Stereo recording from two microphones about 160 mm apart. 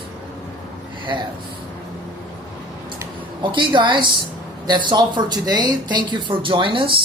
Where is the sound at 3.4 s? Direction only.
30° right (ahead or behind).